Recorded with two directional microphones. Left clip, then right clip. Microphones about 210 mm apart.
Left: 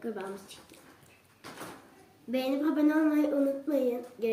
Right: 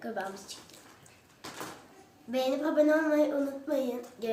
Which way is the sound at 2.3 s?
15° right (ahead or behind).